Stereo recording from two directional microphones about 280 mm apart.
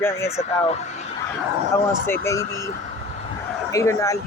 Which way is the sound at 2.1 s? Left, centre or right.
Centre.